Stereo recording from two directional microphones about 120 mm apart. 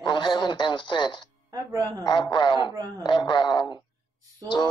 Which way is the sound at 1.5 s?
30° right (ahead or behind).